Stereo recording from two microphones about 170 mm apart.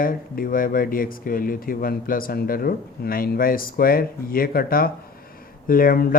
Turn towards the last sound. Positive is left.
turn(degrees=60)  # may be behind; listen again after turning